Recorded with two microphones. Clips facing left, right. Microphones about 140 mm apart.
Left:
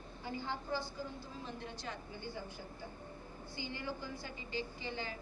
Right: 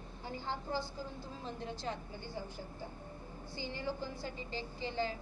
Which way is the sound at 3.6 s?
30° right (ahead or behind).